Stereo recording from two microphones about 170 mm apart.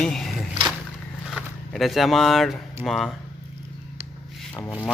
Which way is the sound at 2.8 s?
Centre (ahead or behind).